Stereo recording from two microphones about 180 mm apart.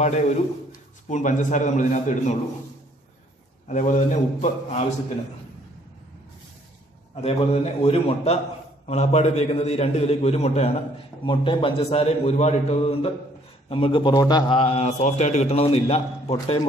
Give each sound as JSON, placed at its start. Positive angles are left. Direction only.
{"t": 1.0, "sound": "a man's voice", "side_deg": 45}
{"t": 3.6, "sound": "a man's voice", "side_deg": 45}
{"t": 7.2, "sound": "a man's voice", "side_deg": 35}